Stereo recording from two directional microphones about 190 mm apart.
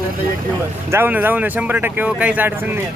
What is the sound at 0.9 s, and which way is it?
Speech, 10° right (ahead or behind).